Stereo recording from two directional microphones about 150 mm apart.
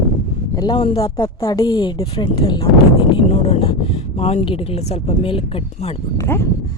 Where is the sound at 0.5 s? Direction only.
25° left (ahead or behind).